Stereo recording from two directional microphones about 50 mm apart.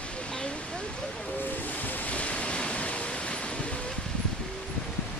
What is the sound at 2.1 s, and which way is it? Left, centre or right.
Waves, left.